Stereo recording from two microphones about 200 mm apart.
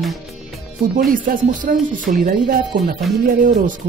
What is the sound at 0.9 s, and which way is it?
Speech, 45° right (ahead or behind).